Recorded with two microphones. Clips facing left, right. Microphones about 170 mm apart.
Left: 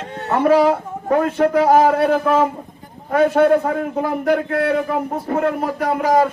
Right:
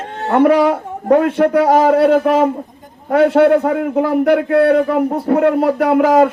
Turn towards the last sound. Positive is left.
turn(degrees=-65)  # may be behind; listen again after turning